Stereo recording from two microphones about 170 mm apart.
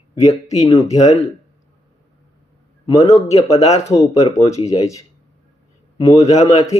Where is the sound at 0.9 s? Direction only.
40° left (ahead or behind).